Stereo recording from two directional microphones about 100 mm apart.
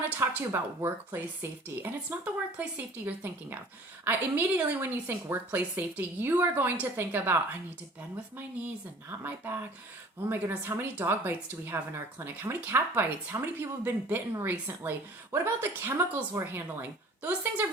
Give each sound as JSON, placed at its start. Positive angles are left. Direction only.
{"t": 0.2, "sound": "speech", "side_deg": -25}
{"t": 9.0, "sound": "a woman's voice", "side_deg": -20}